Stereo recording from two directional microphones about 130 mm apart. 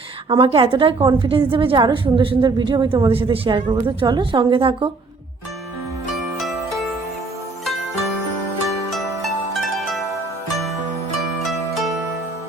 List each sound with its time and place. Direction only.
0.3 s a woman's voice: 40° right (ahead or behind)
6.4 s music: centre (ahead or behind)
8.9 s zither: centre (ahead or behind)